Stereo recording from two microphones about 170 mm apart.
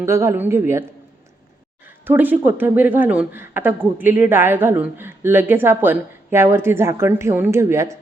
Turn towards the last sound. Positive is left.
turn(degrees=-15)  # may be behind; listen again after turning